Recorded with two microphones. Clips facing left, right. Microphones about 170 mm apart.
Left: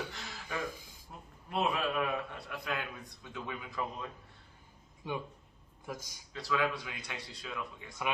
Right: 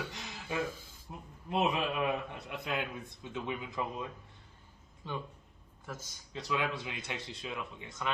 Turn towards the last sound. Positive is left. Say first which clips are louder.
# right 1 dB
turn(degrees=-20)  # may be behind; listen again after turning